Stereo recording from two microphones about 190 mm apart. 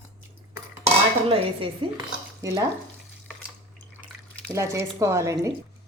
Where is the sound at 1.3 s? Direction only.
30° right (ahead or behind).